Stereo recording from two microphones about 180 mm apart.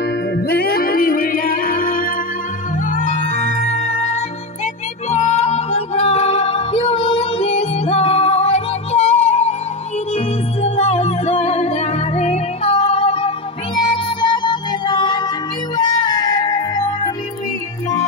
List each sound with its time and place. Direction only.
0.5 s music: 55° left (ahead or behind); by 17.1 s 20° left (ahead or behind)